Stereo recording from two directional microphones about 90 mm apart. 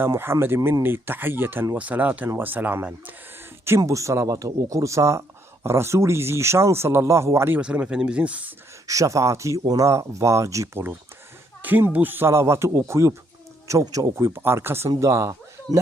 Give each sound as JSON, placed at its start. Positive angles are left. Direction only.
{"t": 0.0, "sound": "speech", "side_deg": -25}
{"t": 3.8, "sound": "speech", "side_deg": -35}
{"t": 7.6, "sound": "speech", "side_deg": -10}
{"t": 8.9, "sound": "speech", "side_deg": -35}
{"t": 11.6, "sound": "speech", "side_deg": -20}